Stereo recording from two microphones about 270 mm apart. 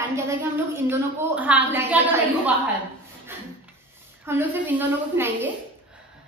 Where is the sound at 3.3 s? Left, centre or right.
Centre.